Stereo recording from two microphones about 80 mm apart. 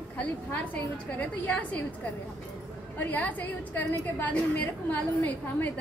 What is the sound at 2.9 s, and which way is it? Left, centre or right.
A woman's voice, left.